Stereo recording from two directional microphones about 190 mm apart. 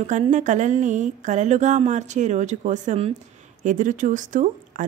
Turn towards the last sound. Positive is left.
turn(degrees=-45)  # may be behind; listen again after turning